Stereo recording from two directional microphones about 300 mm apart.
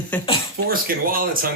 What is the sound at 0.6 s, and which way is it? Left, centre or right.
Speech, right.